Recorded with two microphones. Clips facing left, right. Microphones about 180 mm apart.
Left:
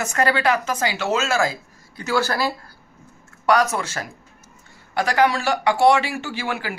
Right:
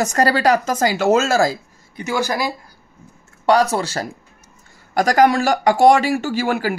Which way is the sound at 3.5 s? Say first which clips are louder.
Right 3 dB; 30° right (ahead or behind).